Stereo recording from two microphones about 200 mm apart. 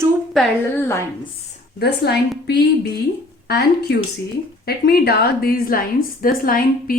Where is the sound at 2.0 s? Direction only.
55° left (ahead or behind).